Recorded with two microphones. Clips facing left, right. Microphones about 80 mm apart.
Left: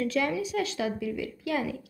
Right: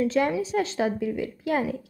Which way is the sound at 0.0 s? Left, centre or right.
Right.